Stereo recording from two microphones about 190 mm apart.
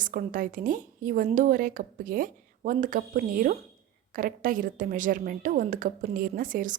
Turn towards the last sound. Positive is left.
turn(degrees=-45)  # may be behind; listen again after turning